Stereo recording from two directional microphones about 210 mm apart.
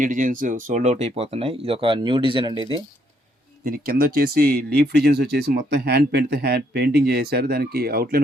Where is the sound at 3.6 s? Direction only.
45° right (ahead or behind).